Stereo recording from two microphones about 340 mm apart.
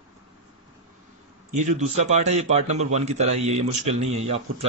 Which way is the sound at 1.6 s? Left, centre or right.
Right.